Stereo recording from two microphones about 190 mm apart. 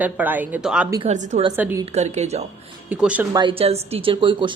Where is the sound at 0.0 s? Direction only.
10° right (ahead or behind).